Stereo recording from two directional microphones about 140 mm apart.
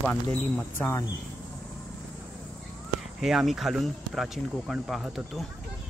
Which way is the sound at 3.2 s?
Centre (ahead or behind).